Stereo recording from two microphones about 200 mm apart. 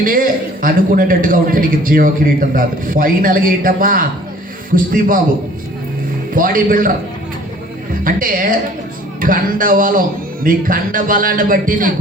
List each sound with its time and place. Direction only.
0.0 s a man's voice: 45° right (ahead or behind)
6.3 s a man's voice: 45° right (ahead or behind)
8.0 s a man's voice: 45° right (ahead or behind)